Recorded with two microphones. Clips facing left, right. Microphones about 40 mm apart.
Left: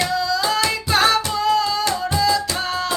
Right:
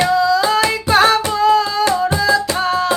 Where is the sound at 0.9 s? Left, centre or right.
Centre.